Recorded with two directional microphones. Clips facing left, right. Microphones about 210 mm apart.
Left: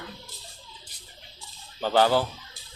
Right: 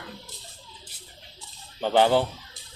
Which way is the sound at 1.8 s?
20° right (ahead or behind).